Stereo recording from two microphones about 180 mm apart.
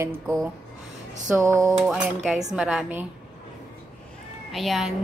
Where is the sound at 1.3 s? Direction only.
15° right (ahead or behind).